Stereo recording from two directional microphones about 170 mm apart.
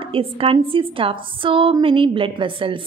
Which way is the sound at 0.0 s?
35° right (ahead or behind).